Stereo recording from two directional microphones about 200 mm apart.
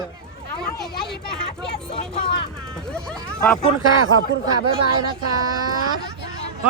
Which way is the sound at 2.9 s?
5° left (ahead or behind).